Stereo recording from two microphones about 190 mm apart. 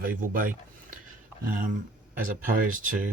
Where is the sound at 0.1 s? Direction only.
45° right (ahead or behind).